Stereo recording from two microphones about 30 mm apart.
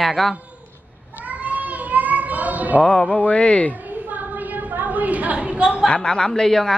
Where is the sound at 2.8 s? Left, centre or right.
Centre.